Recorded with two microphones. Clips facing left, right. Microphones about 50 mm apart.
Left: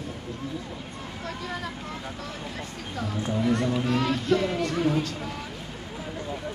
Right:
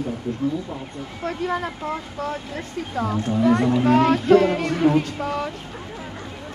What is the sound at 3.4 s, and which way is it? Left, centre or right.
Speech, right.